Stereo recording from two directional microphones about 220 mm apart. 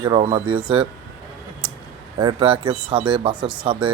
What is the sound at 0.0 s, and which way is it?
Speech, 25° right (ahead or behind).